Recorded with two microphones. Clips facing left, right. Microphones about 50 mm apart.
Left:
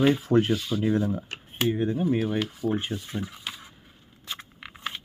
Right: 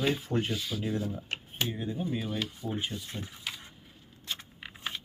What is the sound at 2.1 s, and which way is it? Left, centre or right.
Speech, left.